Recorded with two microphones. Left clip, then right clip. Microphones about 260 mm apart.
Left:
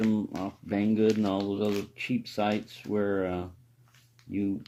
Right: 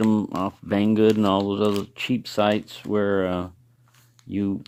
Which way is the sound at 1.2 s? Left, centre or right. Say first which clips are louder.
Right 8 dB; right.